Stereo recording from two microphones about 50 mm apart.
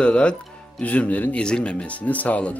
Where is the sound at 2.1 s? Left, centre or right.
Left.